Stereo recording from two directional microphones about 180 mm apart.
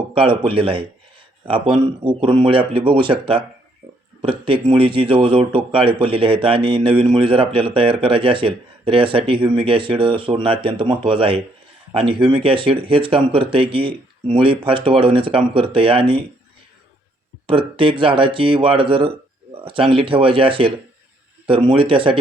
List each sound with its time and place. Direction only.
0.1 s a man's voice: 30° right (ahead or behind)
17.4 s a man's voice: 30° right (ahead or behind)